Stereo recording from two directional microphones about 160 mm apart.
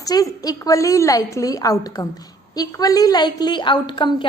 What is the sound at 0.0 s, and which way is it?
A woman's voice, 20° left (ahead or behind).